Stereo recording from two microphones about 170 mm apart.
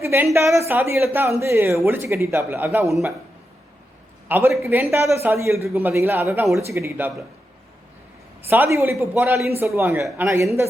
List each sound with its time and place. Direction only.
0.0 s a sound: 15° right (ahead or behind)
0.3 s a man's voice: 15° right (ahead or behind)
4.3 s a man's voice: 10° right (ahead or behind)
8.4 s a man's voice: 10° right (ahead or behind)